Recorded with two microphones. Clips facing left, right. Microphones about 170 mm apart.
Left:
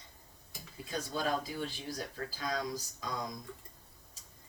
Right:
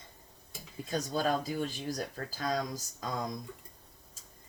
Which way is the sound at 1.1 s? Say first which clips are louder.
Right 3 dB; 40° right (ahead or behind).